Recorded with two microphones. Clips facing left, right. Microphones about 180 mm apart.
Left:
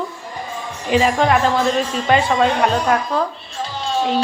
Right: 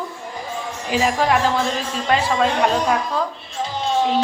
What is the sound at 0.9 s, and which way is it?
Speech, 5° right (ahead or behind).